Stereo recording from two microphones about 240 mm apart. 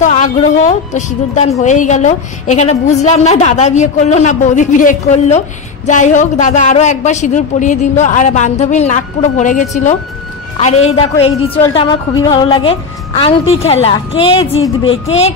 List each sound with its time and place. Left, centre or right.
0.0 s a woman's voice: left